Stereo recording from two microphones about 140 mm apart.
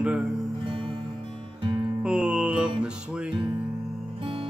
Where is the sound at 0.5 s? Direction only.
40° right (ahead or behind).